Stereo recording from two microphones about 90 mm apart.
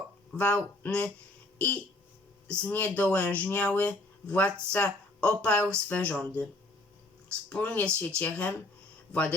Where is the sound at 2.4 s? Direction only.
15° left (ahead or behind).